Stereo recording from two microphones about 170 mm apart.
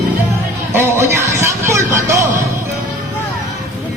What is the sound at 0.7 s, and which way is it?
Music, 15° right (ahead or behind).